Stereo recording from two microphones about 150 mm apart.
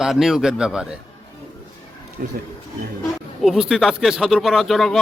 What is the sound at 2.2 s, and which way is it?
Speech, 70° right (ahead or behind).